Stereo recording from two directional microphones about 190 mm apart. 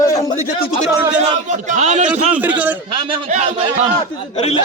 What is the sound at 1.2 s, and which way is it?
Speech, 40° right (ahead or behind).